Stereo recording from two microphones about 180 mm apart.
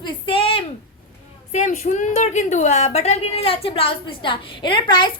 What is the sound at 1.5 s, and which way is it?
A woman's voice, 40° left (ahead or behind).